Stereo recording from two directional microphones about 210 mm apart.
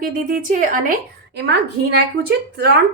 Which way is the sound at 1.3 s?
55° right (ahead or behind).